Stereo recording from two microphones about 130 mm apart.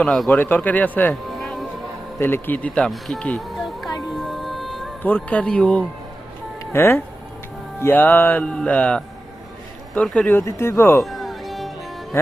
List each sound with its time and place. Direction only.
0.0 s speech: 5° left (ahead or behind)
1.3 s music: centre (ahead or behind)
2.1 s speech: 15° left (ahead or behind); by 3.9 s centre (ahead or behind)
4.1 s music: centre (ahead or behind)
5.0 s speech: 10° left (ahead or behind)
6.7 s speech: 20° left (ahead or behind)
11.0 s music: centre (ahead or behind)